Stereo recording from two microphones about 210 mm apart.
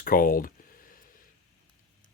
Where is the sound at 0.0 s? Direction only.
45° left (ahead or behind).